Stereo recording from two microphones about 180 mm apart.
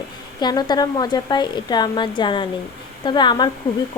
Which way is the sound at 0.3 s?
25° left (ahead or behind).